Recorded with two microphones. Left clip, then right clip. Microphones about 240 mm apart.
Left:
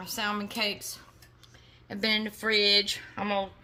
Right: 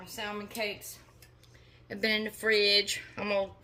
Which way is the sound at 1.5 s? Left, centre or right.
Left.